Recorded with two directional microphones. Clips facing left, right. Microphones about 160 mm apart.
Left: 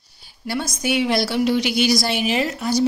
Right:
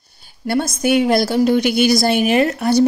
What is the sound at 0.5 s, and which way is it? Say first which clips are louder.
A woman's voice: right 7 dB; 55° right (ahead or behind).